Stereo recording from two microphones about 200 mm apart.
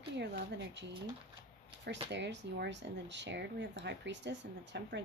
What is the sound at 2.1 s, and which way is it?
Speech, 60° right (ahead or behind).